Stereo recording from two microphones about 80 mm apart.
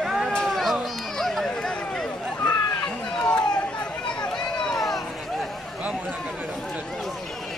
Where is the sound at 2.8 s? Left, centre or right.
Centre.